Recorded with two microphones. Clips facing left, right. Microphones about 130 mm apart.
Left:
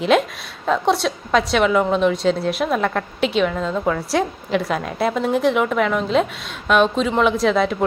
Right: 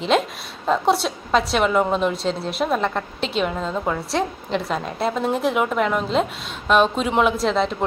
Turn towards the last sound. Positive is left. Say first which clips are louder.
# left 3 dB
turn(degrees=5)  # may be behind; listen again after turning